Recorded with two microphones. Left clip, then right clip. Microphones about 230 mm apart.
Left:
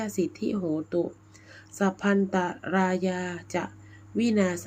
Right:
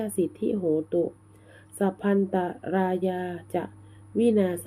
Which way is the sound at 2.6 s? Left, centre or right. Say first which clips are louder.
Even; left.